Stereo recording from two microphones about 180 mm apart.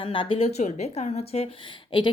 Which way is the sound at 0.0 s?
30° left (ahead or behind).